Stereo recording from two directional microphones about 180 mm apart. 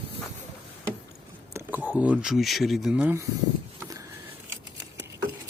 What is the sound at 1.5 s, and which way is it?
Speech, 10° right (ahead or behind).